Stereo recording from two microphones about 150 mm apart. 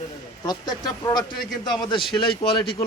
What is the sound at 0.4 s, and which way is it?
A man's voice, 30° left (ahead or behind).